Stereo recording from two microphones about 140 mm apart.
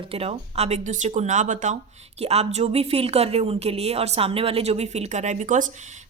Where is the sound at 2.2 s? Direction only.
50° right (ahead or behind).